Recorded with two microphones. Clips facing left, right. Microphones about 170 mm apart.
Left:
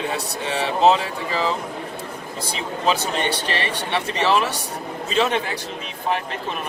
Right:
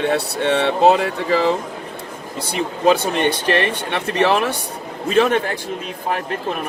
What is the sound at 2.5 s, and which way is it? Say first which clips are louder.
Speech: right 6 dB; 55° right (ahead or behind).